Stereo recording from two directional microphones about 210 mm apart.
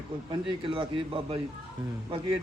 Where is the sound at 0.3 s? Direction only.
25° right (ahead or behind).